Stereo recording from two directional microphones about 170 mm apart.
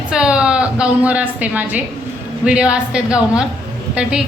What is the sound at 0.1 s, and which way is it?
A woman's voice, 5° right (ahead or behind).